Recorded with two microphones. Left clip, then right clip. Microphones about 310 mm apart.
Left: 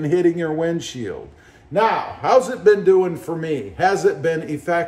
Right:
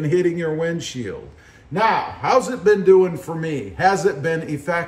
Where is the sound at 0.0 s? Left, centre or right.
Centre.